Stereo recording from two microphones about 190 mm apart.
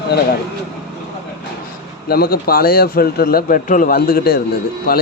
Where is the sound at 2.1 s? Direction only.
55° left (ahead or behind).